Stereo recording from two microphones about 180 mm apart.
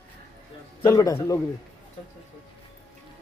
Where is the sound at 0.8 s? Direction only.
15° left (ahead or behind).